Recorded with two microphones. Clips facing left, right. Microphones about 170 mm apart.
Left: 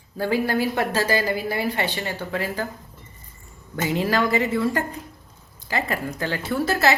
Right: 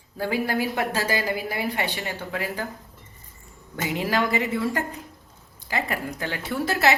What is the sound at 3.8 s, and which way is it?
Speech, 15° right (ahead or behind).